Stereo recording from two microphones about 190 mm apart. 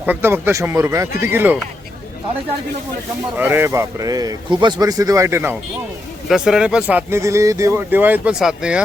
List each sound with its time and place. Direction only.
0.0 s speech: 10° right (ahead or behind)
3.3 s speech: 10° right (ahead or behind)